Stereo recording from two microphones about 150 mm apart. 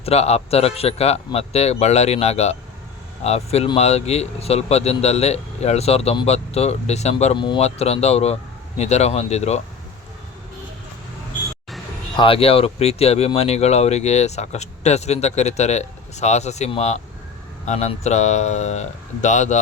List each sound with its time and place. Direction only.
0.0 s speech: 45° left (ahead or behind)
7.3 s speech: 30° left (ahead or behind)
7.6 s speech: 45° left (ahead or behind)
12.1 s speech: 35° left (ahead or behind); by 19.5 s 55° left (ahead or behind)